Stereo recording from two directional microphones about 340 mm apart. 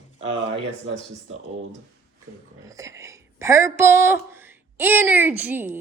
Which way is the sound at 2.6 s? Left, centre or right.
Centre.